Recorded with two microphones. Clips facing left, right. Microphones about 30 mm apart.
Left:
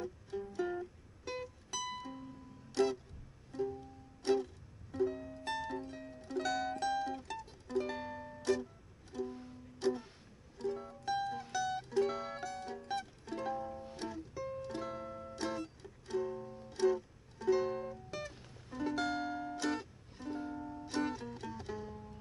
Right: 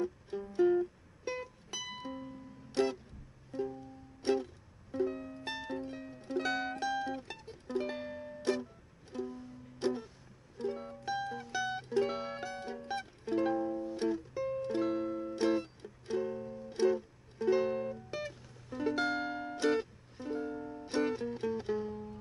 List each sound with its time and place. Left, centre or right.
0.5 s music: centre
4.2 s music: right
7.9 s music: centre
8.4 s music: right
11.1 s music: centre
11.5 s music: right